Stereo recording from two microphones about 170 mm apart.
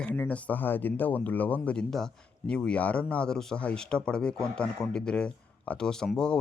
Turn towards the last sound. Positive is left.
turn(degrees=5)  # may be behind; listen again after turning